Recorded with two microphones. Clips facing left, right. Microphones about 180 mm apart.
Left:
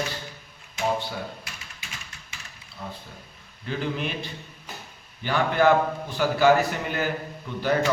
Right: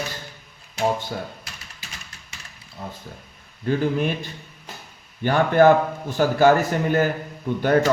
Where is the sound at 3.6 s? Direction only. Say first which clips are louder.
Right 7 dB; 45° right (ahead or behind).